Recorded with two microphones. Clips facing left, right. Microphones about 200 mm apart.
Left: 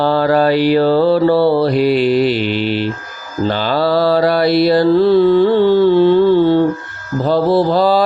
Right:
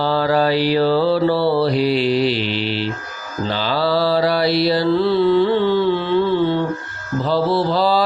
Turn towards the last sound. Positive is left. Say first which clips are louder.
# left 5 dB
turn(degrees=50)  # may be behind; listen again after turning